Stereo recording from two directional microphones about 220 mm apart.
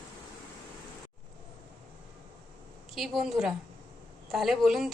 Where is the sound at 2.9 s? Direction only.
Centre (ahead or behind).